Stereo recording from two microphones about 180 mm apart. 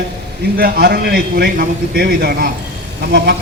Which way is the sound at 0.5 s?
60° right (ahead or behind).